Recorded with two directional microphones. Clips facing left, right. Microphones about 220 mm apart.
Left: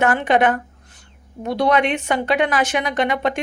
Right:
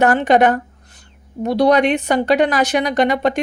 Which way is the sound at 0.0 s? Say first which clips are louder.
Right 4 dB; 40° right (ahead or behind).